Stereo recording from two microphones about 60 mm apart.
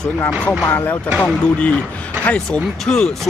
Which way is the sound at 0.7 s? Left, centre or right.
Left.